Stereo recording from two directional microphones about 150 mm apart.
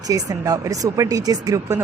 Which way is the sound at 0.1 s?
25° right (ahead or behind).